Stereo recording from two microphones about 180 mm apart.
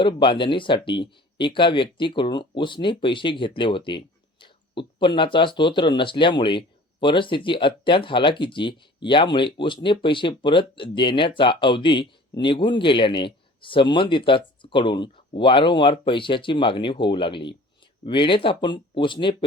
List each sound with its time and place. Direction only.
0.0 s speech: 25° left (ahead or behind)